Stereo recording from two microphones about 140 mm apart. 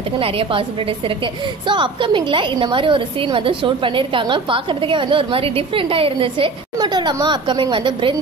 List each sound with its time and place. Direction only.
0.2 s a woman's voice: 40° right (ahead or behind)